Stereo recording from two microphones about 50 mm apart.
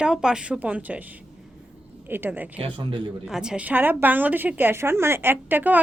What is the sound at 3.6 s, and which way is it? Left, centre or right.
A woman's voice, right.